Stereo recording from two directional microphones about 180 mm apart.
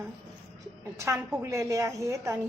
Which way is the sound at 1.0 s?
15° right (ahead or behind).